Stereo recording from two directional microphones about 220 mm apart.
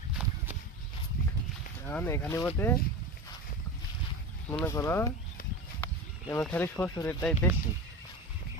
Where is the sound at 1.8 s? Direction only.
10° left (ahead or behind).